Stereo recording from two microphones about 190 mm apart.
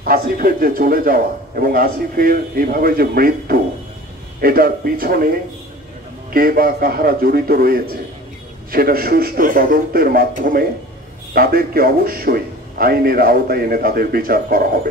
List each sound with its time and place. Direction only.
0.0 s a man's voice: 50° right (ahead or behind)
6.3 s a man's voice: 50° right (ahead or behind)